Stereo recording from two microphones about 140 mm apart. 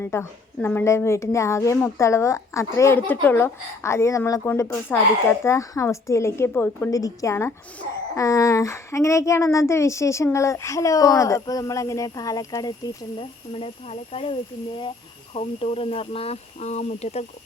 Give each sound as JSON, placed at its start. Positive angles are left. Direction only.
{"t": 0.0, "sound": "a woman's voice", "side_deg": 15}
{"t": 13.1, "sound": "speech", "side_deg": 40}
{"t": 15.4, "sound": "speech", "side_deg": 45}